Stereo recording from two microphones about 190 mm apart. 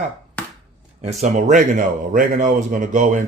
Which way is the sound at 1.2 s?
40° right (ahead or behind).